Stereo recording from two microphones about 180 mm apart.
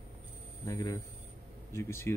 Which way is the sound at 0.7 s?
20° left (ahead or behind).